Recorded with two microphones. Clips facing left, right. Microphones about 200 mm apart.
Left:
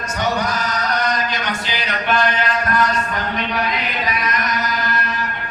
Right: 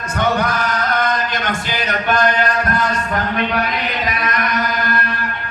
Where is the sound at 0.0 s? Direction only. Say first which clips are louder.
Right 3 dB; 55° right (ahead or behind).